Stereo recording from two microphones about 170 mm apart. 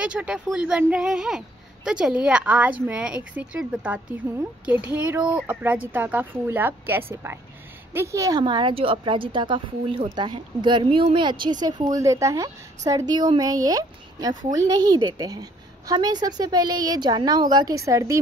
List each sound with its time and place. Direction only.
0.0 s a woman's voice: 5° right (ahead or behind)